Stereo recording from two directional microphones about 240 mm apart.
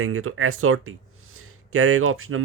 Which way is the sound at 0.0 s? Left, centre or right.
Right.